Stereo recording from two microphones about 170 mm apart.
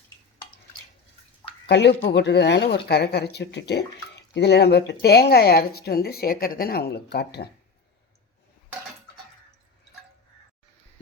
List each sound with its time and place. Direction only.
1.6 s speech: 80° left